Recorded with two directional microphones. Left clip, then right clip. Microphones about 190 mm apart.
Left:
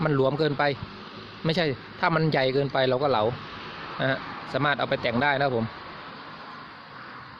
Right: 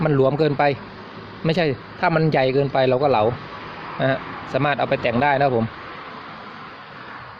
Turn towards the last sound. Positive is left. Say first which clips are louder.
# right 6 dB
turn(degrees=0)  # may be behind; listen again after turning